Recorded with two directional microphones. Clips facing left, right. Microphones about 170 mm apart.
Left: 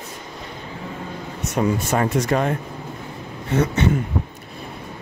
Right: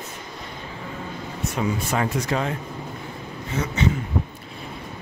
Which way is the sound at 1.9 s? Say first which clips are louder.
Left 4 dB; 45° left (ahead or behind).